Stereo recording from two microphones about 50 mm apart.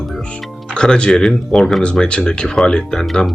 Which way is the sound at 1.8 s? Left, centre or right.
Left.